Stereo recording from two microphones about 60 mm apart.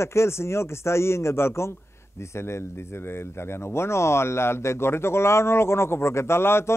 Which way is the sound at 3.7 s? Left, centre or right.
Left.